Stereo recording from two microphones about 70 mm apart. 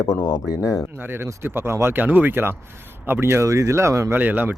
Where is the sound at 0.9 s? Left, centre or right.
Right.